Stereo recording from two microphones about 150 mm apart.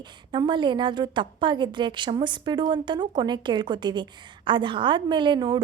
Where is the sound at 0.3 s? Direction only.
30° right (ahead or behind).